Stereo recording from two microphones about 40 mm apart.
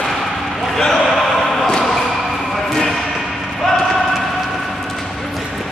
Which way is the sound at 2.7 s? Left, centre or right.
Centre.